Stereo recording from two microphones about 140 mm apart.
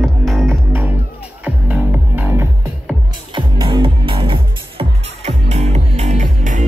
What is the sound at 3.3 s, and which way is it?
Music, 35° right (ahead or behind).